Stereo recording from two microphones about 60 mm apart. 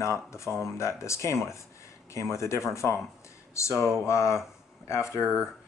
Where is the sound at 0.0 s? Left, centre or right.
Left.